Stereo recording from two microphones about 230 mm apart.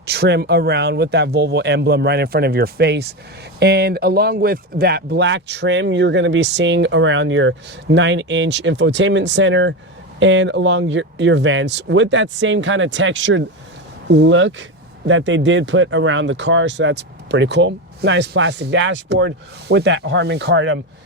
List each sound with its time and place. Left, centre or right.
0.0 s speech: right